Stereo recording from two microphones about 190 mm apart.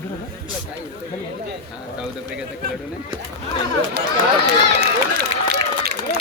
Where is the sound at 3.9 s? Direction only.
60° right (ahead or behind).